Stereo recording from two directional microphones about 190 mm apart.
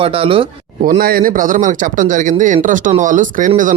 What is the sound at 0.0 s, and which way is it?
Speech, 30° right (ahead or behind).